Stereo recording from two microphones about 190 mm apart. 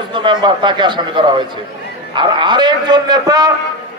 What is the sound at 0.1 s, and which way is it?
A man's voice, 25° right (ahead or behind).